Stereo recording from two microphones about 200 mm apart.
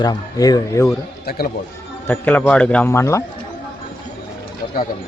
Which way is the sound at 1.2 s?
50° left (ahead or behind).